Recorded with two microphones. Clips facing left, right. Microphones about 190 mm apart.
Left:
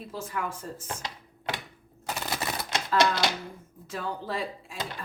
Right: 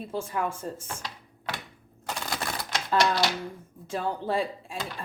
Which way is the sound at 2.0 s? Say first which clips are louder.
Left 1 dB; 5° left (ahead or behind).